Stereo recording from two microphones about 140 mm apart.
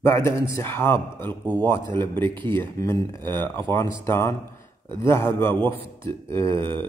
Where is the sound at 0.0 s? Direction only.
20° left (ahead or behind).